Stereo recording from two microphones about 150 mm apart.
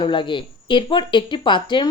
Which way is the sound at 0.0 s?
30° left (ahead or behind).